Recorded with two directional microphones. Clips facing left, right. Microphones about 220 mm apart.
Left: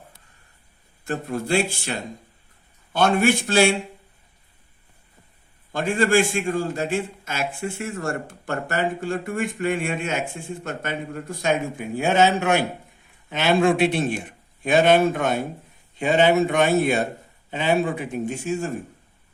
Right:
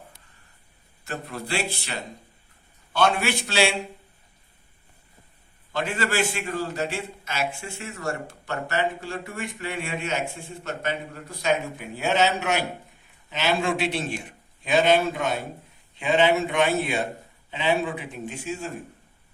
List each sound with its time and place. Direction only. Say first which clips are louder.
1.0 s a man's voice: left 7 dB; 45° left (ahead or behind)
5.7 s a man's voice: left 7 dB; 50° left (ahead or behind)